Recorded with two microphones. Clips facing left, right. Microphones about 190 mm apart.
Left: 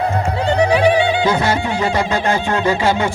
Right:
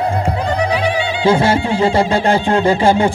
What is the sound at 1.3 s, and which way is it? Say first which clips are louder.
Music: right 4 dB; 30° right (ahead or behind).